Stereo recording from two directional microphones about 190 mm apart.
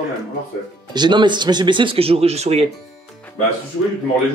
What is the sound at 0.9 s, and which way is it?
Speech, 25° right (ahead or behind).